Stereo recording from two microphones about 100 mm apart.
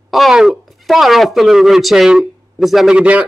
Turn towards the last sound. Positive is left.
turn(degrees=-10)  # may be behind; listen again after turning